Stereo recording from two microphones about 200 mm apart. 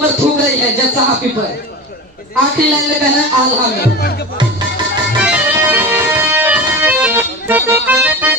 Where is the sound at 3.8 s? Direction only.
50° left (ahead or behind).